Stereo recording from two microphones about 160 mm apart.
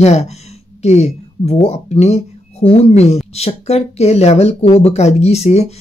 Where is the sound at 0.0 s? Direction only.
40° left (ahead or behind).